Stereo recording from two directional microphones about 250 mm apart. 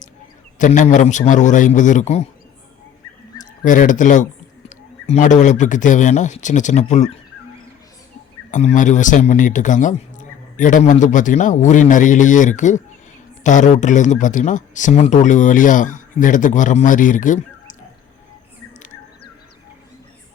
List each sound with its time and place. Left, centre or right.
0.6 s speech: left
3.6 s speech: left
8.4 s speech: left